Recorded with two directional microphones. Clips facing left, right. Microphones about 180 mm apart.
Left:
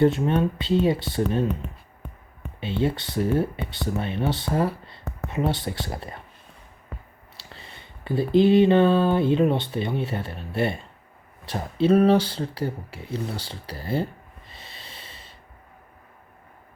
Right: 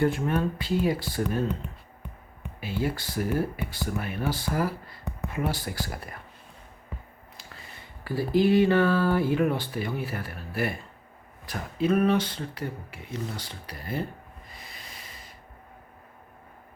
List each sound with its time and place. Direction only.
0.0 s speech: 25° left (ahead or behind)
2.6 s speech: 25° left (ahead or behind)
7.3 s a sound: 30° left (ahead or behind)
11.4 s speech: 30° left (ahead or behind)